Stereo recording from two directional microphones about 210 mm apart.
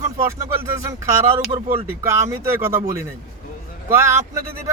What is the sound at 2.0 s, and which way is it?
Speech, 10° right (ahead or behind).